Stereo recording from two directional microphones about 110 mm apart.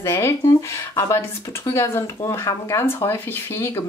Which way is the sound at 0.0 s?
25° left (ahead or behind).